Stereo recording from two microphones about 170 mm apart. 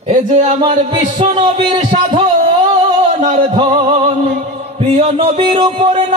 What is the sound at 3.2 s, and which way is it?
Music, 35° right (ahead or behind).